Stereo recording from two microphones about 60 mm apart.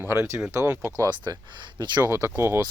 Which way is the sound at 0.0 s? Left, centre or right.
Right.